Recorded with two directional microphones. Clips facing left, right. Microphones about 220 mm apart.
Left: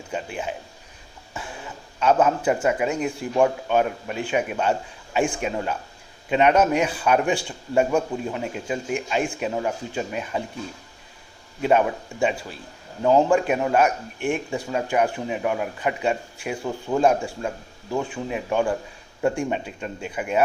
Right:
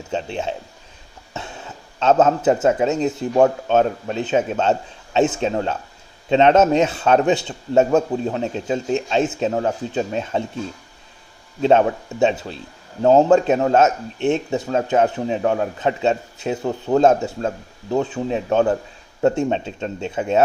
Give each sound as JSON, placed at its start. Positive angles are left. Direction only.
{"t": 0.1, "sound": "a man's voice", "side_deg": -25}
{"t": 2.0, "sound": "a man's voice", "side_deg": -25}
{"t": 11.6, "sound": "a man's voice", "side_deg": -25}